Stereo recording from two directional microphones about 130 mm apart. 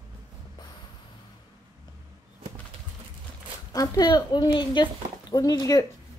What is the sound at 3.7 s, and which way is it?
Speech, 30° left (ahead or behind).